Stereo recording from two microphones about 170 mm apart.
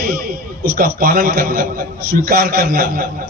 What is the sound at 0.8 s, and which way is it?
A man's voice, 60° right (ahead or behind).